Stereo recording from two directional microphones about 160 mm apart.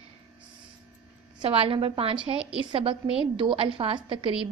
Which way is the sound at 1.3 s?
35° right (ahead or behind).